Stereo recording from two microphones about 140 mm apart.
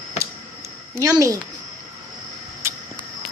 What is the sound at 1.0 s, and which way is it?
Speech, 25° right (ahead or behind).